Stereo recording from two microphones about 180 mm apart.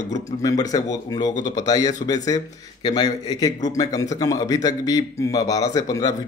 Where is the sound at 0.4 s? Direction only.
20° left (ahead or behind).